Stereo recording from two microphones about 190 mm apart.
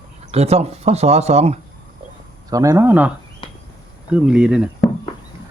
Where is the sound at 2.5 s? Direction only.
15° right (ahead or behind).